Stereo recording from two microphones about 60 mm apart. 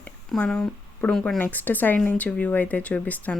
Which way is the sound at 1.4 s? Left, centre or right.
Left.